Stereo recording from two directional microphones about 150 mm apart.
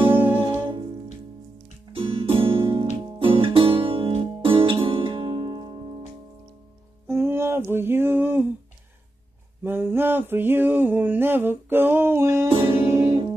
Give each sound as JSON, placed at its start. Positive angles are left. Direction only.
{"t": 0.1, "sound": "music", "side_deg": -10}
{"t": 1.9, "sound": "music", "side_deg": -35}
{"t": 7.1, "sound": "a sound", "side_deg": -15}
{"t": 9.6, "sound": "a sound", "side_deg": -15}
{"t": 12.4, "sound": "music", "side_deg": -35}
{"t": 12.7, "sound": "music", "side_deg": -15}